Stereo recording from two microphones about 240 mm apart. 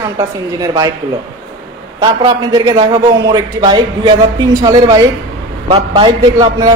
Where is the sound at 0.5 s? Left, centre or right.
Centre.